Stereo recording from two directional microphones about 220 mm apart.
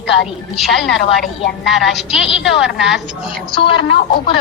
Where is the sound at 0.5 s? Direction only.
Centre (ahead or behind).